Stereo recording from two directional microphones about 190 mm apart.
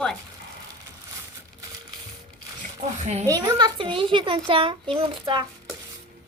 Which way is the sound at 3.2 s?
20° right (ahead or behind).